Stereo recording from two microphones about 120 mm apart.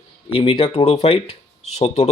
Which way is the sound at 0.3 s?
50° left (ahead or behind).